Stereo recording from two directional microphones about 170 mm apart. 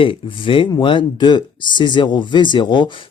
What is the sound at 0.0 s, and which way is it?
Speech, 30° left (ahead or behind).